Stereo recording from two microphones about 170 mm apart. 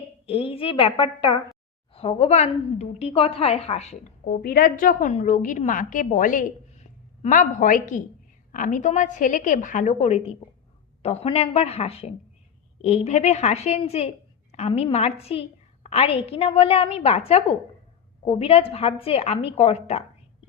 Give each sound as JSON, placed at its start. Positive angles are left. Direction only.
{"t": 0.3, "sound": "a woman's voice", "side_deg": 35}
{"t": 4.3, "sound": "a woman's voice", "side_deg": 60}